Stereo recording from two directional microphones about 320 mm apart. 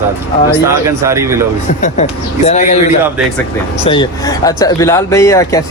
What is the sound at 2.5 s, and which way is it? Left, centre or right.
Speech, left.